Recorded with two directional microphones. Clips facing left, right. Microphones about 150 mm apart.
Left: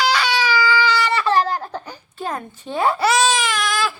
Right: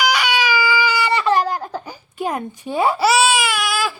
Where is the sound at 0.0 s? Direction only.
15° right (ahead or behind).